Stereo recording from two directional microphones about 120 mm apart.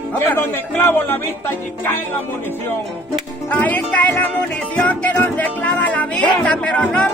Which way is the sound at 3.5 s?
15° left (ahead or behind).